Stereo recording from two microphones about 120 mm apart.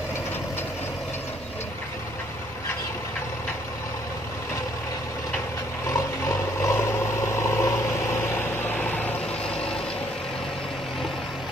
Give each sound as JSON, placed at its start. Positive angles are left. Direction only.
{"t": 5.9, "sound": "vehicle", "side_deg": 25}